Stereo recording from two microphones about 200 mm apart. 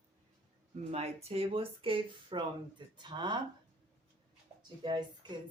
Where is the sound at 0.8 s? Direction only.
30° right (ahead or behind).